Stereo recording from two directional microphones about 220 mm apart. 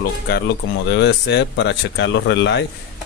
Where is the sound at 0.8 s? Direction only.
50° left (ahead or behind).